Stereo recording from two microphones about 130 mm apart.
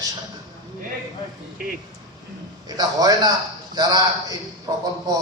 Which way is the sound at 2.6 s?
30° right (ahead or behind).